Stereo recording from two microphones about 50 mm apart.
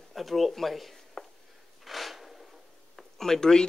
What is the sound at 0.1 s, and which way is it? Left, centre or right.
Speech, centre.